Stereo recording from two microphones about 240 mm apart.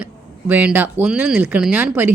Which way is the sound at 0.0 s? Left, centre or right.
Centre.